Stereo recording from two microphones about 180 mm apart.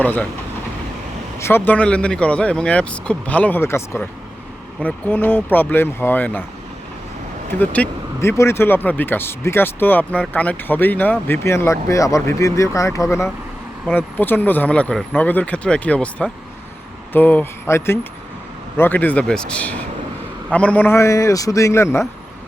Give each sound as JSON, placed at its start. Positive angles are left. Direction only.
{"t": 0.0, "sound": "speech", "side_deg": 10}
{"t": 1.4, "sound": "speech", "side_deg": 15}
{"t": 7.6, "sound": "speech", "side_deg": 10}